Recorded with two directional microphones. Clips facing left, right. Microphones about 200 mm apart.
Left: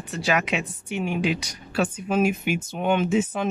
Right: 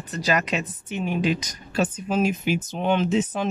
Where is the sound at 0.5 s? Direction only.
10° left (ahead or behind).